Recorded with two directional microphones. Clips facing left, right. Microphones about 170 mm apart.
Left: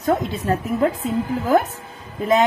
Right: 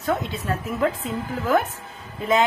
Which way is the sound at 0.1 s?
35° left (ahead or behind).